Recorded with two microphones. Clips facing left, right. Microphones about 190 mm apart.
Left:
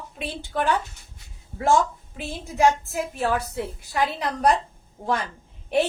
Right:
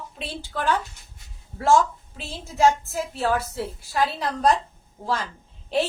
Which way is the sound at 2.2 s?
15° left (ahead or behind).